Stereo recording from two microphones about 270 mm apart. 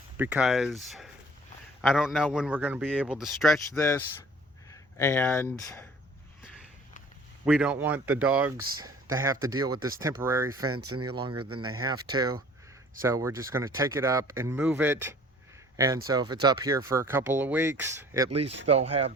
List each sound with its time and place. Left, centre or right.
0.2 s a man's voice: centre
4.7 s a sound: centre
5.5 s speech: centre
7.4 s speech: centre
10.7 s speech: right
11.1 s speech: centre
11.3 s speech: right
11.6 s speech: centre
18.3 s speech: right